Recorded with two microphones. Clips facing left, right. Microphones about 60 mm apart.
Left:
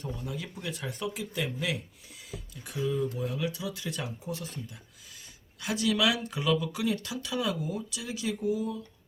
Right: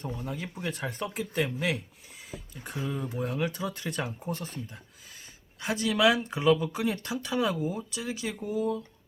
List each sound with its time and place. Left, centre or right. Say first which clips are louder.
0.3 s speech: right 2 dB; right